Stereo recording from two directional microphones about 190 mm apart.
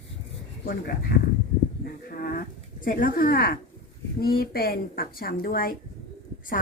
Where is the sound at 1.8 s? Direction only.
50° left (ahead or behind).